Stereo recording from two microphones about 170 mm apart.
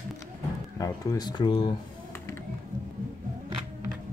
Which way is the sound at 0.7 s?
20° left (ahead or behind).